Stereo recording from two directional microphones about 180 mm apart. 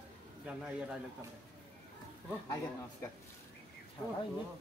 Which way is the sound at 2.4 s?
15° left (ahead or behind).